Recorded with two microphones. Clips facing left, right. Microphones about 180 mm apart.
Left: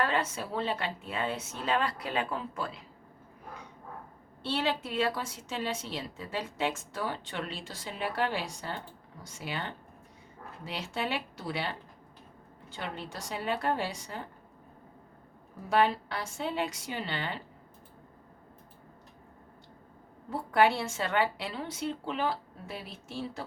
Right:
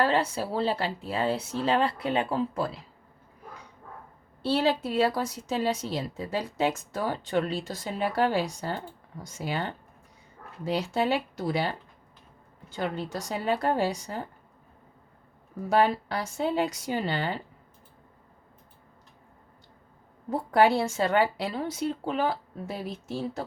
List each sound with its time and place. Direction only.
0.0 s a woman's voice: 30° right (ahead or behind)
4.4 s a woman's voice: 35° right (ahead or behind)
12.7 s a woman's voice: 40° right (ahead or behind)
15.7 s a woman's voice: 40° right (ahead or behind)
20.3 s a woman's voice: 40° right (ahead or behind)